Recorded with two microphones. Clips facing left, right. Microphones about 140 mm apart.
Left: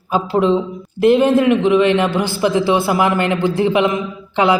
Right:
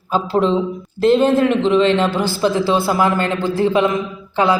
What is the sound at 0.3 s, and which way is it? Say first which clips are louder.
A man's voice: left 1 dB; 15° left (ahead or behind).